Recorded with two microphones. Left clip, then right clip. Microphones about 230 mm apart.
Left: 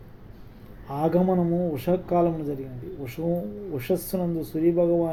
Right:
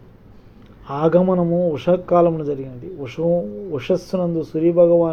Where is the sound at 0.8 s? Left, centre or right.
Right.